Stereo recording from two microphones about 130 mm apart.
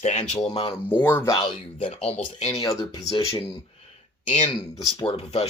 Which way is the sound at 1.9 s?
50° left (ahead or behind).